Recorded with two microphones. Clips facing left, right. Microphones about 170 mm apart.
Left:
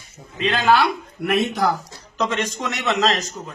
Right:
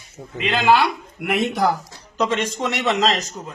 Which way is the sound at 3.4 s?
5° right (ahead or behind).